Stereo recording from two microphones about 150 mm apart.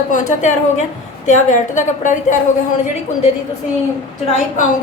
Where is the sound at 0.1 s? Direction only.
55° left (ahead or behind).